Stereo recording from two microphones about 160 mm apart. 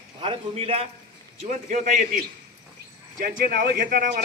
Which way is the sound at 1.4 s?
50° right (ahead or behind).